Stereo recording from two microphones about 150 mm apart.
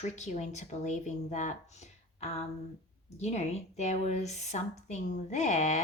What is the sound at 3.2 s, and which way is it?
Speech, 50° left (ahead or behind).